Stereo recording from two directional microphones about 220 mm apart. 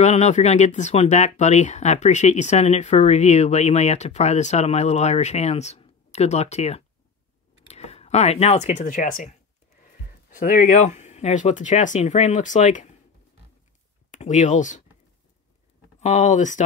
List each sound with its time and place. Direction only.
0.0 s speech: 30° left (ahead or behind)
10.4 s speech: 40° left (ahead or behind)
14.1 s speech: 35° left (ahead or behind)
16.0 s speech: 35° left (ahead or behind)